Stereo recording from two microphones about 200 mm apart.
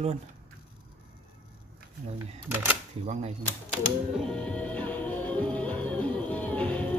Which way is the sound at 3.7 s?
Centre (ahead or behind).